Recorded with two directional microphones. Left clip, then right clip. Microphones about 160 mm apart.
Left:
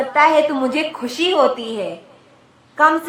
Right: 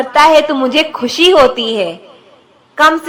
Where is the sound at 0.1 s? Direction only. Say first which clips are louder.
Right 6 dB; 30° right (ahead or behind).